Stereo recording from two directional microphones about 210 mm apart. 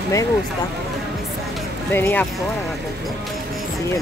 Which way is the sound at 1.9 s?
10° left (ahead or behind).